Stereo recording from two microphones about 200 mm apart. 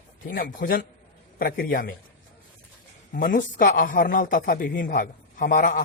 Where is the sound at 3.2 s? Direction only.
40° left (ahead or behind).